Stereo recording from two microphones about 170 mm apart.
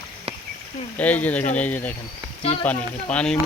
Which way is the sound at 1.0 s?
10° left (ahead or behind).